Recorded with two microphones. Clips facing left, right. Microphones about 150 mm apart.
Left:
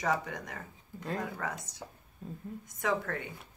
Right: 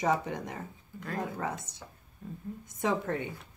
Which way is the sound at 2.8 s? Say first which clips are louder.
Right 2 dB; 25° right (ahead or behind).